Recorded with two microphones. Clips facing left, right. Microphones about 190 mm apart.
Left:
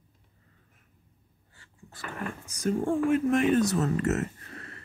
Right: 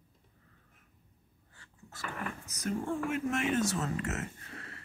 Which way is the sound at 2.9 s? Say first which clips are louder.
Left 9 dB; 35° left (ahead or behind).